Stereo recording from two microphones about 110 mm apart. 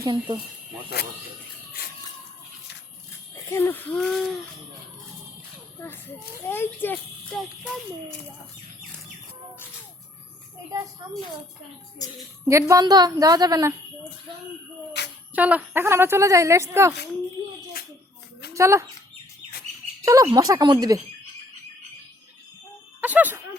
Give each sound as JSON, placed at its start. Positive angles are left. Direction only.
{"t": 0.0, "sound": "speech", "side_deg": -45}
{"t": 3.3, "sound": "a sound", "side_deg": 20}
{"t": 3.9, "sound": "a child's voice", "side_deg": 0}
{"t": 5.8, "sound": "speech", "side_deg": 20}
{"t": 7.3, "sound": "a child's voice", "side_deg": 0}
{"t": 12.5, "sound": "a woman's voice", "side_deg": -30}
{"t": 15.4, "sound": "a woman's voice", "side_deg": -15}
{"t": 18.5, "sound": "speech", "side_deg": -25}
{"t": 20.0, "sound": "a woman's voice", "side_deg": -30}
{"t": 23.0, "sound": "speech", "side_deg": -15}